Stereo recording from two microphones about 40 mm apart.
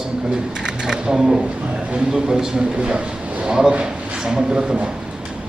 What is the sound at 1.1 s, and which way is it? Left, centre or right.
A man's voice, centre.